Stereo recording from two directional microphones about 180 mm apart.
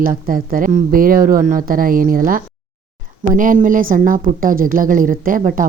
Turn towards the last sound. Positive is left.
turn(degrees=-50)  # may be behind; listen again after turning